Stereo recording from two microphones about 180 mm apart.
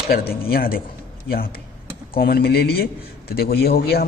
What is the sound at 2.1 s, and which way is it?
A man's voice, 60° left (ahead or behind).